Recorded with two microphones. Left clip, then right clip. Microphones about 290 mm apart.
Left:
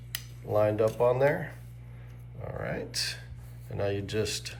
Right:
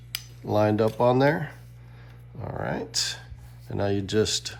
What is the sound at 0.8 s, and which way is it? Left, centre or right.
Speech, centre.